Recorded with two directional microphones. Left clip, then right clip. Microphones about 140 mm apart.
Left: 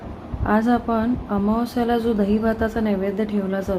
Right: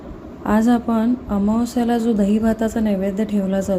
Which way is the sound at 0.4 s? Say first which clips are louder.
Right 1 dB; 30° right (ahead or behind).